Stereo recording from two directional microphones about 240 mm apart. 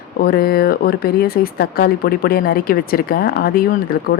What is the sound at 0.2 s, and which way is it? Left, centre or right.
Speech, left.